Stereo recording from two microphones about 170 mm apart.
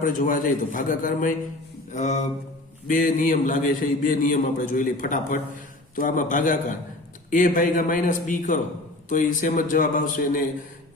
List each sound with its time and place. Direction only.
0.0 s a man's voice: 50° left (ahead or behind)
1.9 s mantra: 45° left (ahead or behind)
2.8 s a man's voice: 50° left (ahead or behind)